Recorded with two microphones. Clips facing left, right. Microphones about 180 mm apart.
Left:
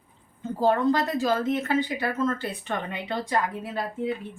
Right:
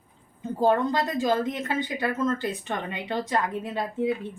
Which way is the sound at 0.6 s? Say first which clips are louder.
Left 1 dB; 15° right (ahead or behind).